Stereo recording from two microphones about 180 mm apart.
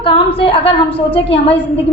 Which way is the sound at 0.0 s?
30° left (ahead or behind).